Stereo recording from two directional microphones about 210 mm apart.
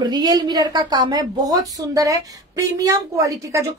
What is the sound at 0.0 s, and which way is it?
A woman's voice, 20° right (ahead or behind).